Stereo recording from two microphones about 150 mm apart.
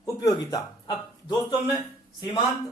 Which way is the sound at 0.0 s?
25° left (ahead or behind).